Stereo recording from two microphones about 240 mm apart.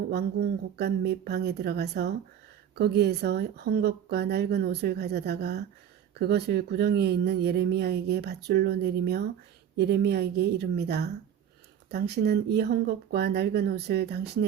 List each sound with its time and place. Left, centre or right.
0.1 s speech: right